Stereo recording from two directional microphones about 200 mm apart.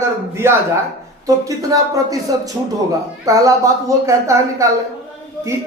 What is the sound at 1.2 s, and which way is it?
Speech, 15° right (ahead or behind).